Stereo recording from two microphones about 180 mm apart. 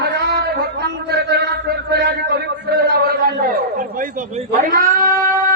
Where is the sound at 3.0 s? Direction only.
50° right (ahead or behind).